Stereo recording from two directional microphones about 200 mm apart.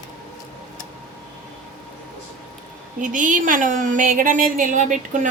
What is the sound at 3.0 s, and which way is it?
A woman's voice, 40° right (ahead or behind).